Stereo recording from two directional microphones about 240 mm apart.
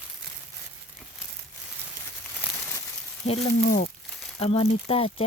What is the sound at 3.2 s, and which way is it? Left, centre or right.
Speech, left.